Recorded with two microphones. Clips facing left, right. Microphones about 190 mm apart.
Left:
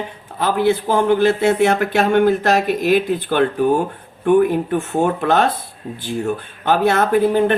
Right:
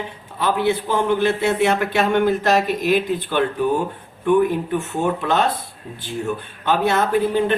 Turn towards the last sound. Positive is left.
turn(degrees=55)  # may be behind; listen again after turning